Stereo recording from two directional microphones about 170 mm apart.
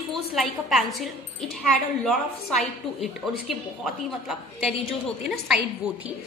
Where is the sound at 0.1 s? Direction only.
Centre (ahead or behind).